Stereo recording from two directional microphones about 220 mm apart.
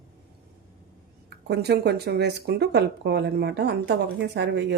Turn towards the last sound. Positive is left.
turn(degrees=-50)  # may be behind; listen again after turning